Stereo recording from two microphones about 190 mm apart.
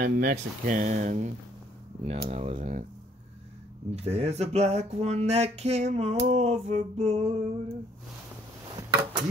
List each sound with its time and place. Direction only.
0.0 s speech: 45° right (ahead or behind)
3.9 s speech: 35° right (ahead or behind)